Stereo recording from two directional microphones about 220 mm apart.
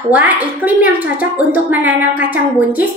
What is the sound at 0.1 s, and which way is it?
A woman's voice, 10° right (ahead or behind).